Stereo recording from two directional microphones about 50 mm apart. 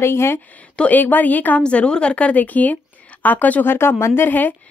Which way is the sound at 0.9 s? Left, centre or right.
Left.